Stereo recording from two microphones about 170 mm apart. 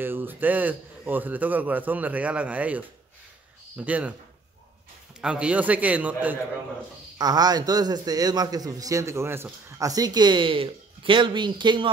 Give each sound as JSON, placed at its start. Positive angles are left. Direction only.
{"t": 0.0, "sound": "a man's voice", "side_deg": -10}
{"t": 5.2, "sound": "a man's voice", "side_deg": -5}
{"t": 7.2, "sound": "a man's voice", "side_deg": -25}